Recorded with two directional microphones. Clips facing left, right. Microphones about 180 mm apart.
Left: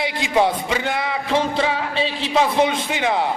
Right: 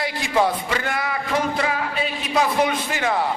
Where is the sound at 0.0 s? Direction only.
20° left (ahead or behind).